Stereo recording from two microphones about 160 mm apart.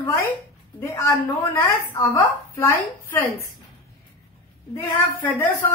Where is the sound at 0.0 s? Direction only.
15° left (ahead or behind).